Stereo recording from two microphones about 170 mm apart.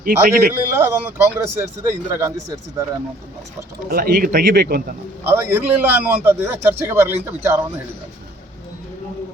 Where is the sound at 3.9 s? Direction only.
60° right (ahead or behind).